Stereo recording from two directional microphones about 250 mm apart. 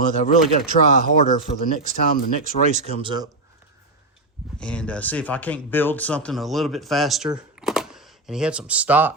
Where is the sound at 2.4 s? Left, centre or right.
Right.